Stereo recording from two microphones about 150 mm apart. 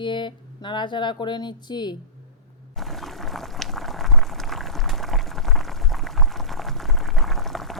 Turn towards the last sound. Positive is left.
turn(degrees=0)  # may be behind; listen again after turning